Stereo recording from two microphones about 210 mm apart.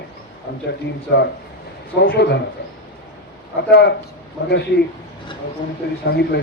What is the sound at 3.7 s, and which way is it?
Speech, 50° left (ahead or behind).